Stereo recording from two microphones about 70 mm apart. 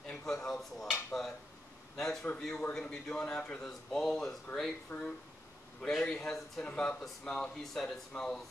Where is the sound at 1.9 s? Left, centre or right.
Centre.